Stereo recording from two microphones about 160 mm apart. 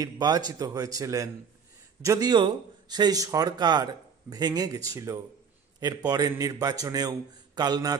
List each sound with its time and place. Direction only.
0.0 s speech: 25° right (ahead or behind)